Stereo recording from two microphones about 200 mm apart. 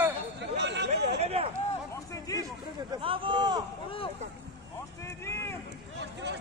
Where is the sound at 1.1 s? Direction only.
30° right (ahead or behind).